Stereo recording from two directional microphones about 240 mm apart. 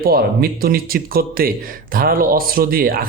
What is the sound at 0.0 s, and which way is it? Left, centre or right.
A man's voice, right.